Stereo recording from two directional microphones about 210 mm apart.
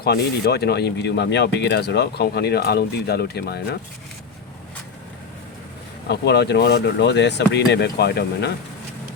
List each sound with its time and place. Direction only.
0.0 s speech: 50° left (ahead or behind)
6.1 s speech: 55° left (ahead or behind)